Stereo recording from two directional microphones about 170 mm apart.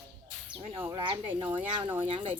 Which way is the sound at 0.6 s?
35° right (ahead or behind).